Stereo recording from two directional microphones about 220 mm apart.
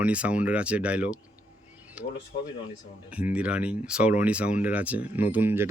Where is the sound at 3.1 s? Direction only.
5° right (ahead or behind).